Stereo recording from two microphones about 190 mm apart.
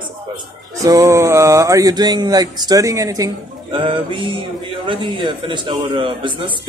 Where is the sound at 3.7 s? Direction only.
25° right (ahead or behind).